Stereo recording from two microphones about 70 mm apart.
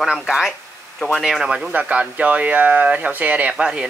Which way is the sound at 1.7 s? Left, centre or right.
Centre.